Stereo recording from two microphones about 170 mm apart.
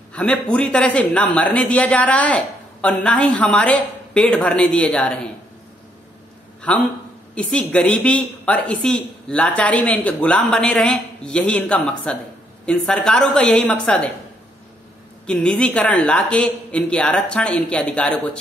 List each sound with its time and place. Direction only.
0.1 s speech: 5° left (ahead or behind)
6.7 s a woman's voice: 10° left (ahead or behind)
15.2 s speech: 5° left (ahead or behind)